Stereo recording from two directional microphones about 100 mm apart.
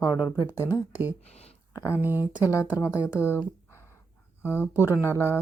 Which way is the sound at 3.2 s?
25° left (ahead or behind).